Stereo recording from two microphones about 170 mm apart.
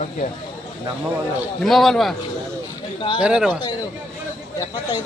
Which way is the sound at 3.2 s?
5° right (ahead or behind).